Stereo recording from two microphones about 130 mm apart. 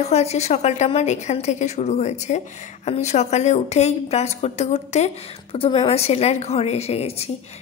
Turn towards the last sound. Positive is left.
turn(degrees=55)  # may be behind; listen again after turning